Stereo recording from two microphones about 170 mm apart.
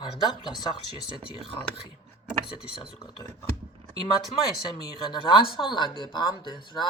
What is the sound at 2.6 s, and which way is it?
Speech, 30° left (ahead or behind).